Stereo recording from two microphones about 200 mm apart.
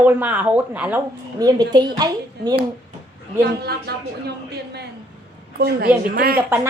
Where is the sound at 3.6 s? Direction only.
55° right (ahead or behind).